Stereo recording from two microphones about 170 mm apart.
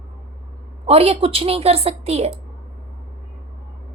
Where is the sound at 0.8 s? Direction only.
35° right (ahead or behind).